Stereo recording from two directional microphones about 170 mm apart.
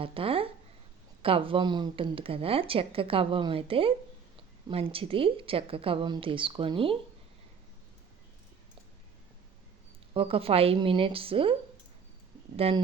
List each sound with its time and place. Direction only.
0.0 s a woman's voice: 35° right (ahead or behind)
10.2 s a woman's voice: 35° right (ahead or behind)
12.5 s a woman's voice: 35° right (ahead or behind)